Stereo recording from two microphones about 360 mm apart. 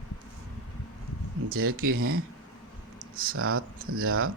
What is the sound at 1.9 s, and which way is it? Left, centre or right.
Speech, right.